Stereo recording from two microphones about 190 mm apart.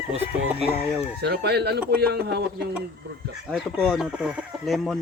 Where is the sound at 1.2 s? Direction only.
60° right (ahead or behind).